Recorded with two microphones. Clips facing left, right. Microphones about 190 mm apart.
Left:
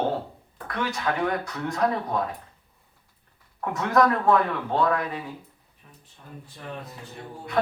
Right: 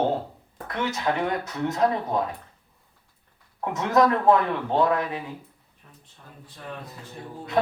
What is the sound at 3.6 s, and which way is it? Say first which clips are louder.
Speech: right 1 dB; 20° right (ahead or behind).